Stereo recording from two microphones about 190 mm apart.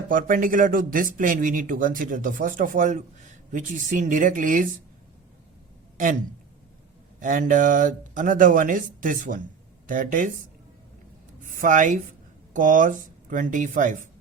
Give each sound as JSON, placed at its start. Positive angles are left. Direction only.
{"t": 0.1, "sound": "speech", "side_deg": -45}
{"t": 7.2, "sound": "speech", "side_deg": -45}
{"t": 11.4, "sound": "speech", "side_deg": -45}